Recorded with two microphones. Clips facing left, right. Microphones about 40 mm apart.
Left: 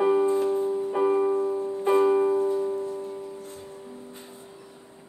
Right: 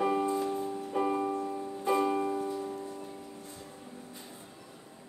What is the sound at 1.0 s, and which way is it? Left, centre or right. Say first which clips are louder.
Music: left 8 dB; centre.